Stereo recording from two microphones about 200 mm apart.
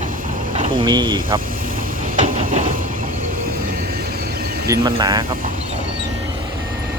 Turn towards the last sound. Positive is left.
turn(degrees=-20)  # may be behind; listen again after turning